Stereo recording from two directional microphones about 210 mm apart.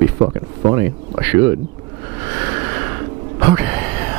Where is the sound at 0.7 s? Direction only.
15° right (ahead or behind).